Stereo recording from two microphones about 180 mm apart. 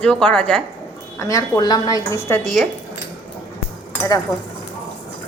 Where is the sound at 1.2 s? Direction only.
15° left (ahead or behind).